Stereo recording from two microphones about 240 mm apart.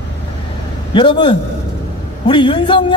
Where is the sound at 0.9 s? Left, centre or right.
Centre.